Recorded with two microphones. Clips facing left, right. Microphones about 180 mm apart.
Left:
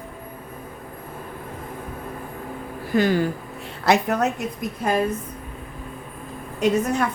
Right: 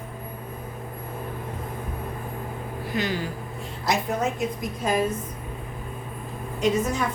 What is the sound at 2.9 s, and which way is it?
Speech, 50° left (ahead or behind).